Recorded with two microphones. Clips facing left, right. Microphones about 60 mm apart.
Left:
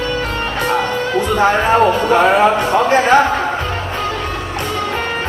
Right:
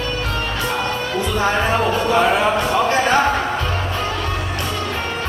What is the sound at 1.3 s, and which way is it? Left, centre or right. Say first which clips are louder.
Music: left 6 dB; left.